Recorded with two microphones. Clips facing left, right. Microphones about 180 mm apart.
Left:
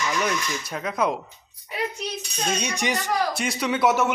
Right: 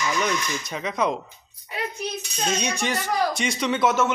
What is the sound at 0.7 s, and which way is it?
Speech, 5° left (ahead or behind).